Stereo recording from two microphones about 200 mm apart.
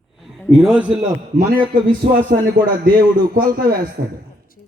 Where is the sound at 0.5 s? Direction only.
5° right (ahead or behind).